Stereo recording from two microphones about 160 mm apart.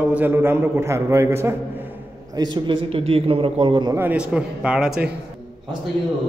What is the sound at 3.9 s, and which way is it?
A man's voice, 10° right (ahead or behind).